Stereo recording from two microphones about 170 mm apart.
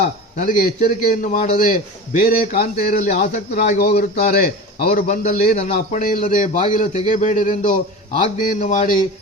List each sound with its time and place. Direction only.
0.3 s a man's voice: 55° left (ahead or behind)
3.5 s a man's voice: 65° left (ahead or behind)
5.0 s a man's voice: 45° left (ahead or behind)
5.5 s a man's voice: 40° left (ahead or behind)
6.0 s a man's voice: 55° left (ahead or behind)